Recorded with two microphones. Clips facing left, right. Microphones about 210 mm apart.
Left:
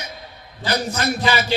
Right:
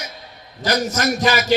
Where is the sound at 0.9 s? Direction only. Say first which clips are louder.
Right 2 dB; 45° right (ahead or behind).